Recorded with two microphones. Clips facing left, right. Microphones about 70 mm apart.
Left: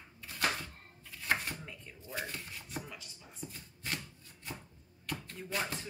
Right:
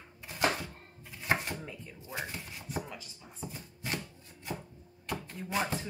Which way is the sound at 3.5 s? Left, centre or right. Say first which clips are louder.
Right 3 dB; centre.